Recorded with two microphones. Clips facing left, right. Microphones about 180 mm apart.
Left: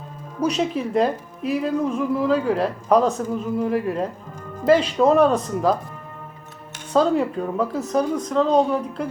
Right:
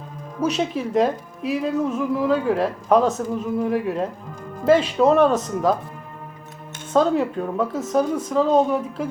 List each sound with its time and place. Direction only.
0.3 s a woman's voice: 5° right (ahead or behind)
6.9 s a woman's voice: centre (ahead or behind)